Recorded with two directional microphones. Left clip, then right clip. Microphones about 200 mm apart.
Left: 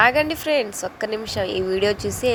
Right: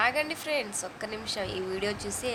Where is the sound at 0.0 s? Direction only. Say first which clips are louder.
Left 10 dB; 35° left (ahead or behind).